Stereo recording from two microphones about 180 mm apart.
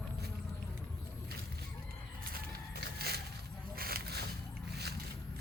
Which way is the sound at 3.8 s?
55° right (ahead or behind).